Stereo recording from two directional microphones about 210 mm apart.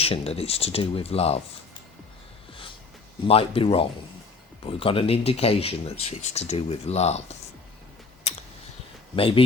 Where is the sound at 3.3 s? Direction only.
25° left (ahead or behind).